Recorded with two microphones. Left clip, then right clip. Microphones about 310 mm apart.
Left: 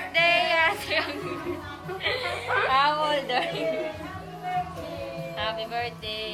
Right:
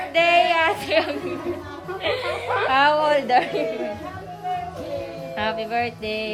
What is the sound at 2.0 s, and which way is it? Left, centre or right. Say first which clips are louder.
Speech: right 4 dB; right.